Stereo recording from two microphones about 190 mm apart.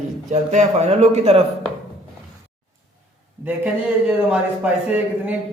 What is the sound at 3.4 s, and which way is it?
Speech, 5° right (ahead or behind).